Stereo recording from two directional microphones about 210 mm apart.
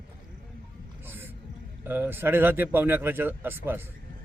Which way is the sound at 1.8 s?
10° right (ahead or behind).